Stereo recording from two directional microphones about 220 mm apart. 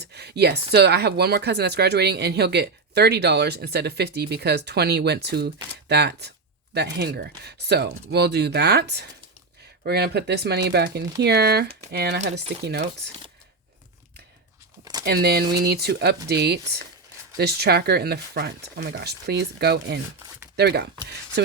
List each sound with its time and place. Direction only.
0.1 s speech: 50° right (ahead or behind)
15.0 s speech: 45° right (ahead or behind)